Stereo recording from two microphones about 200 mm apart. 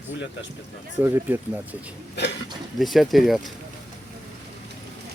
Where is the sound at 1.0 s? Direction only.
10° right (ahead or behind).